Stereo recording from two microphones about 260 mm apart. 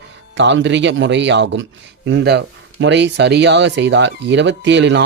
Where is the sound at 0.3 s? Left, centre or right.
Right.